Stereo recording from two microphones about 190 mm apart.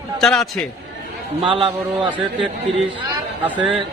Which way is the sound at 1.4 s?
25° right (ahead or behind).